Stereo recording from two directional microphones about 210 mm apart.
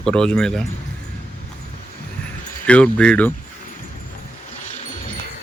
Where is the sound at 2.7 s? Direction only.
5° left (ahead or behind).